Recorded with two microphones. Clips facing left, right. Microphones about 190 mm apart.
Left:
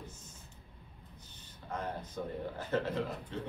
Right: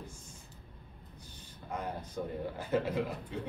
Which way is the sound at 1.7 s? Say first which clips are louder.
Even; 10° right (ahead or behind).